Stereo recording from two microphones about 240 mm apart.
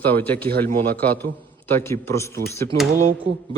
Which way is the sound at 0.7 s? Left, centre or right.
Right.